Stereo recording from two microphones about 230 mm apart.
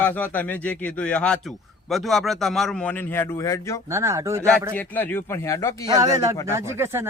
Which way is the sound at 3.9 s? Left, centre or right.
Centre.